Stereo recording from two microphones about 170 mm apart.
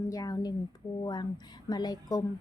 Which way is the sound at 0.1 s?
20° left (ahead or behind).